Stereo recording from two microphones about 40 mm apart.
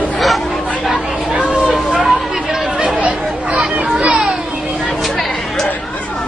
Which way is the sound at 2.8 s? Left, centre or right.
Right.